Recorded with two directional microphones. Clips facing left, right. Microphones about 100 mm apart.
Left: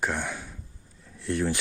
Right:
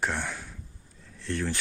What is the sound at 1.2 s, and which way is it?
Speech, 15° left (ahead or behind).